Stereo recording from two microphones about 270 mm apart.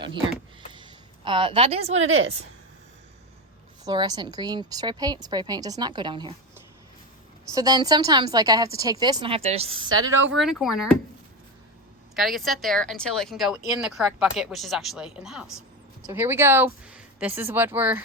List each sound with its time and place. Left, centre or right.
0.7 s a sound: centre
2.0 s a woman's voice: right
3.8 s a woman's voice: centre
7.5 s a woman's voice: centre
10.3 s speech: centre
12.1 s a woman's voice: centre